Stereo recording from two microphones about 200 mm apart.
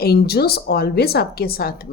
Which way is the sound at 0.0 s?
50° left (ahead or behind).